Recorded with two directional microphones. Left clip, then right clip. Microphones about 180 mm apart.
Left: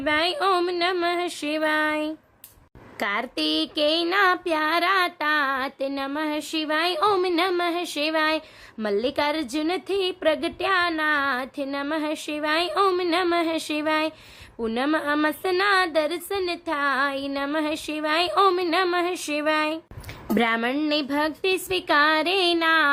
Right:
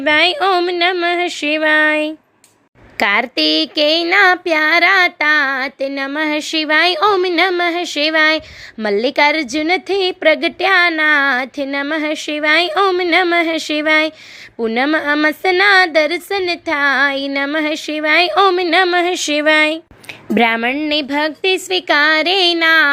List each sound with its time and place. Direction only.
0.0 s a woman's voice: 20° right (ahead or behind)
6.1 s speech: 30° right (ahead or behind)
12.8 s a woman's voice: 10° right (ahead or behind)
13.3 s a woman's voice: 20° right (ahead or behind)